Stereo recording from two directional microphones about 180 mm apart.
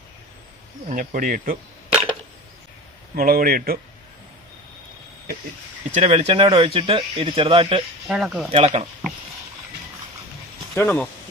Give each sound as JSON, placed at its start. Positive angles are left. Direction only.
{"t": 0.9, "sound": "speech", "side_deg": -45}
{"t": 3.2, "sound": "speech", "side_deg": -55}
{"t": 5.9, "sound": "speech", "side_deg": -35}
{"t": 8.0, "sound": "speech", "side_deg": 0}
{"t": 8.5, "sound": "speech", "side_deg": -40}
{"t": 10.8, "sound": "speech", "side_deg": 10}